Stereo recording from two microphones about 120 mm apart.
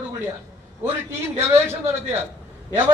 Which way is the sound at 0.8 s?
20° right (ahead or behind).